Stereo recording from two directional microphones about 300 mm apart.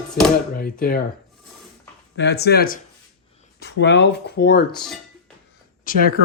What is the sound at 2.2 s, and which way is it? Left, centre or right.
Speech, left.